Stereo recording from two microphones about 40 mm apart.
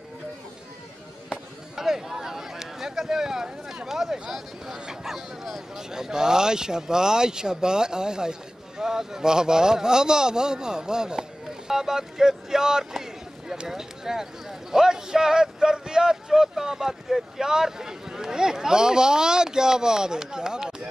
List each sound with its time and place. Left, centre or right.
1.3 s speech: centre